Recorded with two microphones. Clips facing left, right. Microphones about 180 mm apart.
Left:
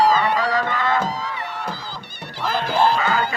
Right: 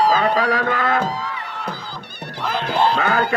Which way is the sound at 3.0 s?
60° right (ahead or behind).